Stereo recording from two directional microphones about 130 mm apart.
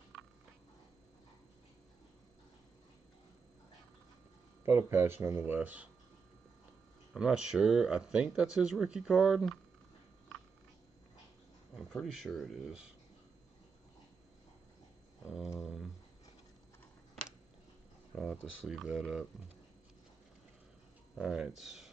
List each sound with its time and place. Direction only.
4.6 s speech: 20° right (ahead or behind)
7.2 s speech: 5° right (ahead or behind)
11.7 s speech: centre (ahead or behind)
15.6 s a sound: 5° right (ahead or behind)
18.1 s speech: centre (ahead or behind)
21.2 s speech: 5° right (ahead or behind)